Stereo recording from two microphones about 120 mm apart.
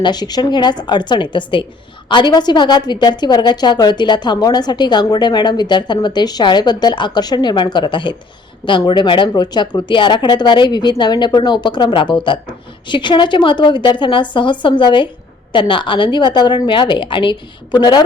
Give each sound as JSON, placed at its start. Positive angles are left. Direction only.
{"t": 0.0, "sound": "a woman's voice", "side_deg": 35}